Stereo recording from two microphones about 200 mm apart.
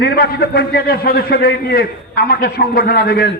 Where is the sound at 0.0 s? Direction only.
50° left (ahead or behind).